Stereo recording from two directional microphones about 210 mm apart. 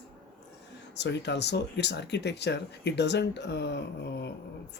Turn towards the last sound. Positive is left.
turn(degrees=55)  # may be behind; listen again after turning